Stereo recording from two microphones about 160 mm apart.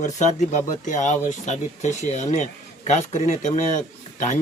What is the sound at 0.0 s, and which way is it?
Speech, 45° left (ahead or behind).